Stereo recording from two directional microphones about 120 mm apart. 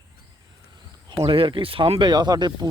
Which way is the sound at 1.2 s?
45° right (ahead or behind).